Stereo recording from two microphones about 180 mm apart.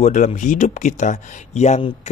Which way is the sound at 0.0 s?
40° left (ahead or behind).